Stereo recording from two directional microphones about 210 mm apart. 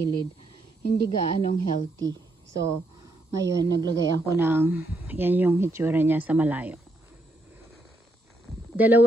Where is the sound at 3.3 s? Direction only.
15° right (ahead or behind).